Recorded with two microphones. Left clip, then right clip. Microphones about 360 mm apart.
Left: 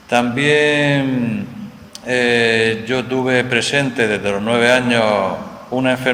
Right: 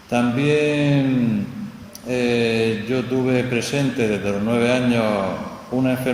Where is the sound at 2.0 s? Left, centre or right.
Left.